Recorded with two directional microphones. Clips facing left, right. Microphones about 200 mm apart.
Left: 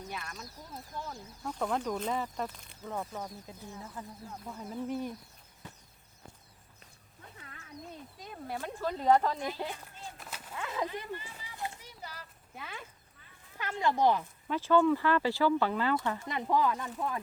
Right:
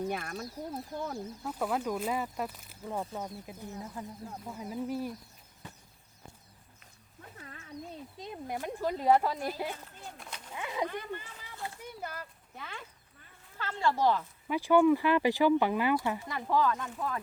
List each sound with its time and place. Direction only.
0.1 s speech: 55° right (ahead or behind)
1.5 s speech: 5° right (ahead or behind)
8.2 s speech: 20° right (ahead or behind)
10.2 s a sound: 5° left (ahead or behind)
10.5 s speech: 15° right (ahead or behind)
10.8 s speech: 55° right (ahead or behind)
11.4 s a sound: 15° left (ahead or behind)
11.8 s speech: 55° right (ahead or behind)
12.5 s speech: 5° left (ahead or behind)
13.6 s speech: 15° left (ahead or behind)
14.4 s speech: 10° right (ahead or behind)
16.3 s speech: 15° left (ahead or behind)
16.8 s speech: centre (ahead or behind)